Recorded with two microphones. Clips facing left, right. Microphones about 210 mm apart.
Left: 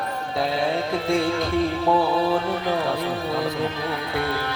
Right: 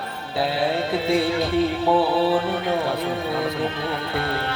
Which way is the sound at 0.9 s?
5° right (ahead or behind).